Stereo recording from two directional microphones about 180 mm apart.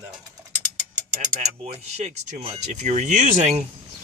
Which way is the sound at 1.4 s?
40° right (ahead or behind).